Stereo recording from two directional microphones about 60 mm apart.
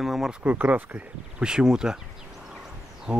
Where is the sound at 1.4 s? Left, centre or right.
Centre.